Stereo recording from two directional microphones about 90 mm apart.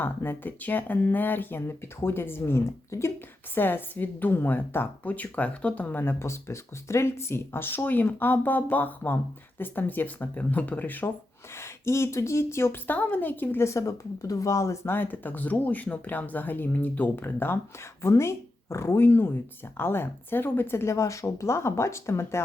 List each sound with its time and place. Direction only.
0.0 s a woman's voice: 25° left (ahead or behind)